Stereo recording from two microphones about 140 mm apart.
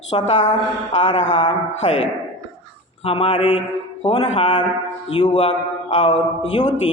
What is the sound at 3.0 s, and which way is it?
A man's voice, 40° left (ahead or behind).